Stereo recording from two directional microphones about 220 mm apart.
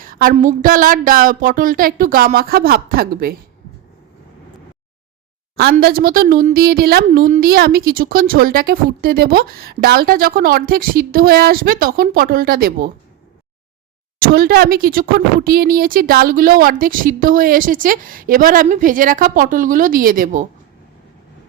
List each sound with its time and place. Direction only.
0.0 s a sound: 40° right (ahead or behind)
0.3 s a woman's voice: 35° right (ahead or behind)
5.7 s a woman's voice: 40° right (ahead or behind)
14.2 s a woman's voice: 45° right (ahead or behind)